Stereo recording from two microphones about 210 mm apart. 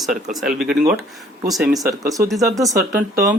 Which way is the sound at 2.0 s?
15° right (ahead or behind).